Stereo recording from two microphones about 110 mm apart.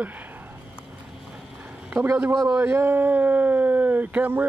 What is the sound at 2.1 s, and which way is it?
Speech, 15° right (ahead or behind).